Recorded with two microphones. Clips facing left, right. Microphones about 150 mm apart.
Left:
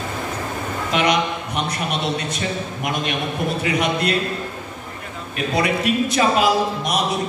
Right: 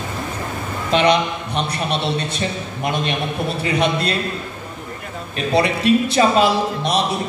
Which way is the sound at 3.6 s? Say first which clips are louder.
Right 3 dB; 30° right (ahead or behind).